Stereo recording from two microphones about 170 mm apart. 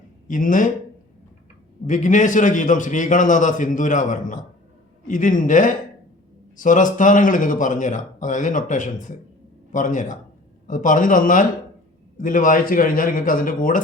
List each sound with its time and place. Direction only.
0.3 s speech: 50° left (ahead or behind)
1.9 s speech: 45° left (ahead or behind)